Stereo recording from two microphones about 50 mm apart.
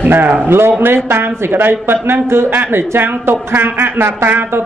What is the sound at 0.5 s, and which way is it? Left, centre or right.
Speech, right.